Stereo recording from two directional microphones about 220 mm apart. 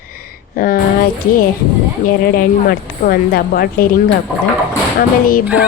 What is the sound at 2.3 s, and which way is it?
A woman's voice, 45° left (ahead or behind).